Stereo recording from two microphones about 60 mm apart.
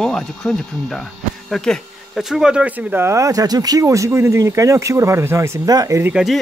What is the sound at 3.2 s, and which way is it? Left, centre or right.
Speech, right.